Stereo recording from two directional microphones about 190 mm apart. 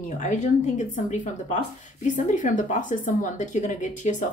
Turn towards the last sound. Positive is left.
turn(degrees=40)  # may be behind; listen again after turning